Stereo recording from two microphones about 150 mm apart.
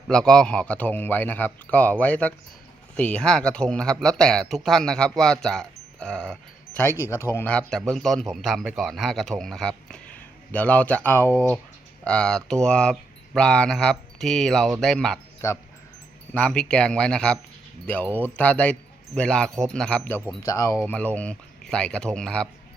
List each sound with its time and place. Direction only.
0.1 s a man's voice: 5° left (ahead or behind)
6.8 s a man's voice: 15° left (ahead or behind)
12.0 s a man's voice: 5° left (ahead or behind)
15.4 s speech: 20° left (ahead or behind)
16.3 s a man's voice: 5° left (ahead or behind)
20.4 s speech: 20° left (ahead or behind)
20.8 s a man's voice: 10° left (ahead or behind)